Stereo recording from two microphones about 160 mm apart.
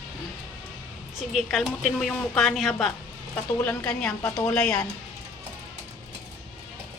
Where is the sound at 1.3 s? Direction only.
Centre (ahead or behind).